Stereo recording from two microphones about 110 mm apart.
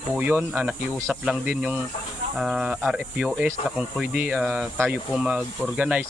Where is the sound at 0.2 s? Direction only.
20° right (ahead or behind).